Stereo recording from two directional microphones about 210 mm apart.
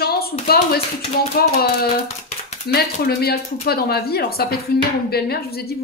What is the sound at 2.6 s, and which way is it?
Speech, 50° left (ahead or behind).